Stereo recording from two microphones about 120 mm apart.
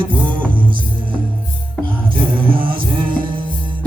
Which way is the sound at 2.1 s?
45° right (ahead or behind).